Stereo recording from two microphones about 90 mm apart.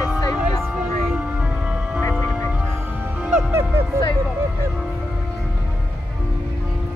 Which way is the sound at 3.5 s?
25° right (ahead or behind).